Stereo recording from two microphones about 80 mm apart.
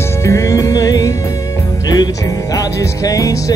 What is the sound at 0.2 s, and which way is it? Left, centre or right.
Music, left.